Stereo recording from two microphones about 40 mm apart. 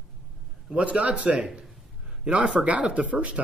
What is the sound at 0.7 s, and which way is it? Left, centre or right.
Speech, right.